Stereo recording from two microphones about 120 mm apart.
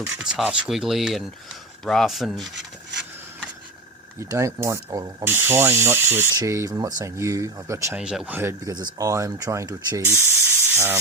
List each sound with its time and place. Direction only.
0.0 s speech: 5° right (ahead or behind)
4.2 s speech: 25° right (ahead or behind)
5.2 s speech: 20° right (ahead or behind)
7.9 s speech: 5° right (ahead or behind)
8.4 s speech: 20° right (ahead or behind)
8.7 s speech: 30° right (ahead or behind)
10.5 s steam: 20° right (ahead or behind)